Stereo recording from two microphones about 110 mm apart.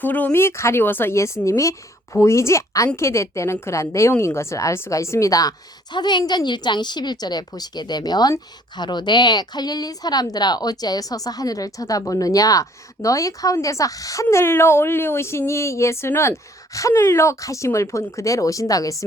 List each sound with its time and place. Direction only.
0.0 s a woman's voice: 15° left (ahead or behind); by 19.0 s 30° left (ahead or behind)